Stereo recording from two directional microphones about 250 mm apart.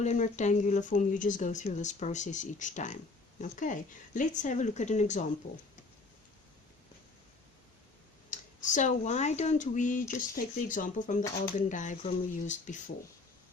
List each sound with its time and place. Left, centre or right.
0.0 s speech: left
8.3 s speech: left